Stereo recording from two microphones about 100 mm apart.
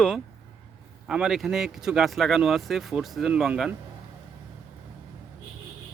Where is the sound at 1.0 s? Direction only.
5° right (ahead or behind).